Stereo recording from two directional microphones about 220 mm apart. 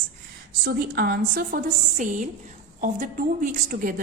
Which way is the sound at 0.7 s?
45° right (ahead or behind).